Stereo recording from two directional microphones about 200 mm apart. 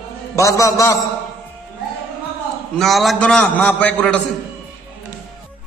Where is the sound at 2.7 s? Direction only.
Centre (ahead or behind).